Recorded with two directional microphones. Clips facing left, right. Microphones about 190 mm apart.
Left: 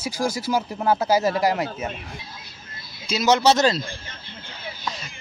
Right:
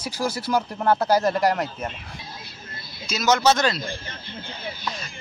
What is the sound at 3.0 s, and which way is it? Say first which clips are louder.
Speech: left 2 dB; 30° left (ahead or behind).